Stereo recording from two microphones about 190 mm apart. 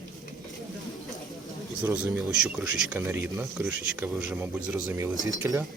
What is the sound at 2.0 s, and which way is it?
Speech, 5° right (ahead or behind).